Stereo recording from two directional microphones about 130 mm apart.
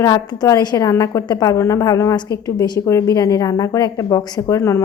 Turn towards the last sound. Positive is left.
turn(degrees=20)  # may be behind; listen again after turning